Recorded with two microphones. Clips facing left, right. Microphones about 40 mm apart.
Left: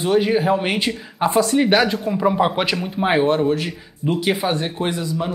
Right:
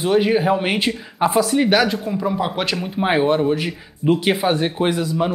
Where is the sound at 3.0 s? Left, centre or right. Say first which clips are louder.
Even; centre; by 5.3 s right.